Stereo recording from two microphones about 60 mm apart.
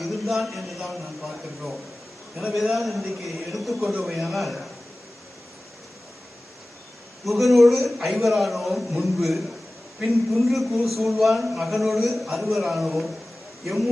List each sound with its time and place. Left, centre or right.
0.0 s speech: centre
7.3 s speech: centre